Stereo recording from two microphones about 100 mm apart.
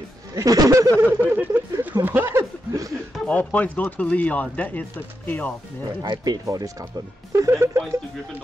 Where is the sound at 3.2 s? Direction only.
15° left (ahead or behind).